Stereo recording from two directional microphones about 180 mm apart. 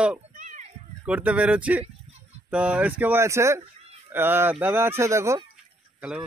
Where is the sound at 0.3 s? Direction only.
45° right (ahead or behind).